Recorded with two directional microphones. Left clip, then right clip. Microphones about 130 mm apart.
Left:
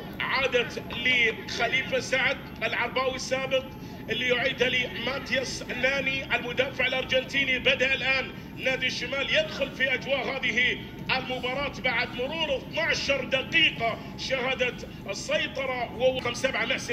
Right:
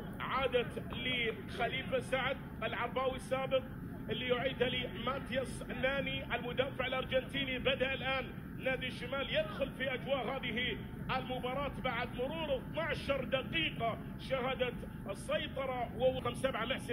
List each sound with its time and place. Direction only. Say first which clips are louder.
0.2 s a man's voice: left 9 dB; 25° left (ahead or behind)